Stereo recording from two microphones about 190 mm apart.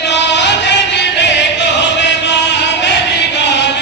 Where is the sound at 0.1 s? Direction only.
65° left (ahead or behind).